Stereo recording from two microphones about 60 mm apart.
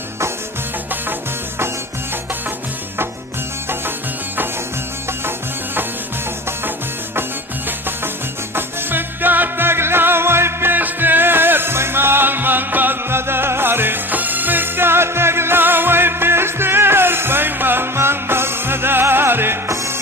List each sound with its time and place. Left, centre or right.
8.5 s music: right
19.6 s music: right